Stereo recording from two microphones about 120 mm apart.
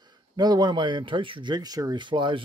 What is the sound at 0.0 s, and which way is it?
Speech, 35° right (ahead or behind).